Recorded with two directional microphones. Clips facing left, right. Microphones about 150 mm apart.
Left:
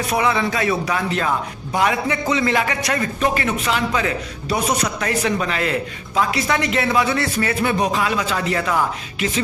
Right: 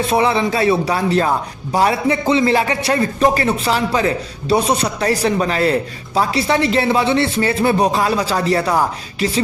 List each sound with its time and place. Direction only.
0.0 s speech: 30° right (ahead or behind)